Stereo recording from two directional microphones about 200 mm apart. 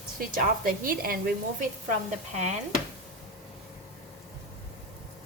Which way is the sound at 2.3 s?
35° right (ahead or behind).